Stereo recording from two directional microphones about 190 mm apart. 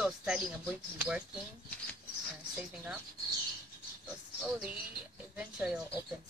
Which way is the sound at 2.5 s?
5° right (ahead or behind).